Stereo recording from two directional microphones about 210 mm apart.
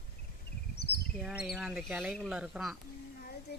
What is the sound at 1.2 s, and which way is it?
Speech, 5° right (ahead or behind).